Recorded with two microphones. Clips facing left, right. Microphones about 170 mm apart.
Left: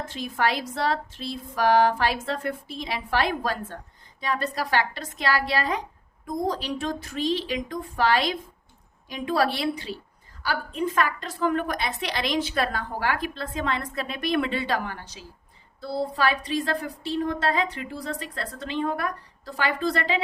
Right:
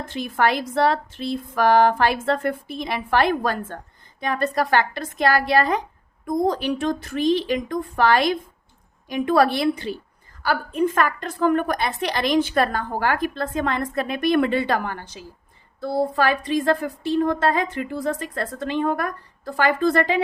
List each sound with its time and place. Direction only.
0.1 s a woman's voice: 60° right (ahead or behind)